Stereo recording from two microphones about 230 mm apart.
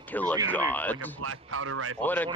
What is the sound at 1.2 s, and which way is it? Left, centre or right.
Speech, right.